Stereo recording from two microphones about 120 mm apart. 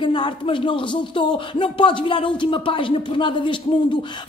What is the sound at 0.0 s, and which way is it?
Speech, 40° left (ahead or behind).